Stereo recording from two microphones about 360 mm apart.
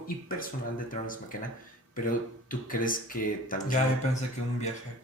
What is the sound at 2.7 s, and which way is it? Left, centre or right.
A man's voice, left.